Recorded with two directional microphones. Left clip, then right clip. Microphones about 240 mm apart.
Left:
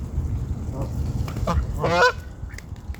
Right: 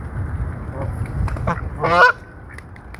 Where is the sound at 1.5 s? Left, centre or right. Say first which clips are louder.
Right 3 dB; left.